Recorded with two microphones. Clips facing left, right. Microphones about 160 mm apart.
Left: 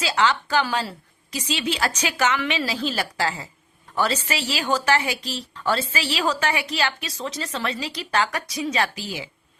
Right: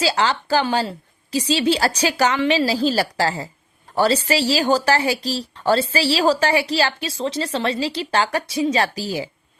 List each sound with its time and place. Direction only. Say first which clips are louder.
0.0 s a woman's voice: right 2 dB; 30° right (ahead or behind)